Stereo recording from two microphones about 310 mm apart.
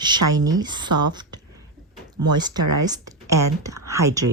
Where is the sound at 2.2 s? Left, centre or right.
Centre.